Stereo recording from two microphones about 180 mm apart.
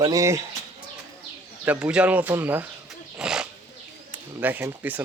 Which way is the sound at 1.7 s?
5° right (ahead or behind).